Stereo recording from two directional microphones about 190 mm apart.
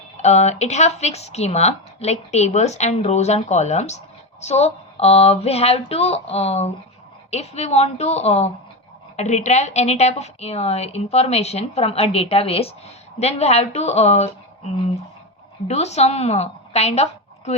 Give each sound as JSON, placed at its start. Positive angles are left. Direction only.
{"t": 0.2, "sound": "a woman's voice", "side_deg": 35}